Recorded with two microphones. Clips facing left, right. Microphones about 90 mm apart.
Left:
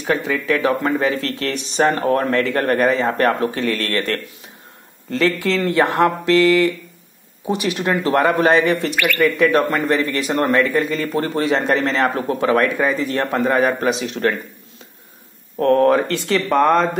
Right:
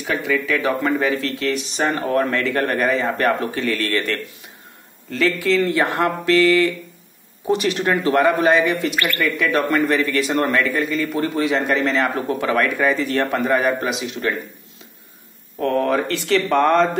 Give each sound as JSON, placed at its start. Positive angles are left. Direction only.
{"t": 0.0, "sound": "speech", "side_deg": 30}
{"t": 5.1, "sound": "speech", "side_deg": 30}
{"t": 7.4, "sound": "speech", "side_deg": 5}
{"t": 8.0, "sound": "speech", "side_deg": 30}
{"t": 15.6, "sound": "speech", "side_deg": 40}
{"t": 16.4, "sound": "speech", "side_deg": 15}